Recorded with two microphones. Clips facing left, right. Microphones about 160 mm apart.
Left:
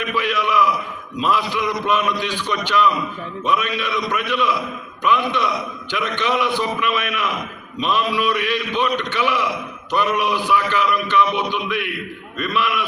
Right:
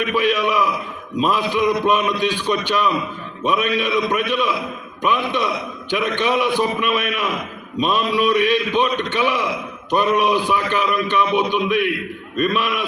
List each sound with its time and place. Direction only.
0.1 s a man's voice: 15° right (ahead or behind)